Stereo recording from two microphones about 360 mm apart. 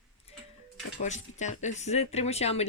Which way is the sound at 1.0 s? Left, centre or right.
Centre.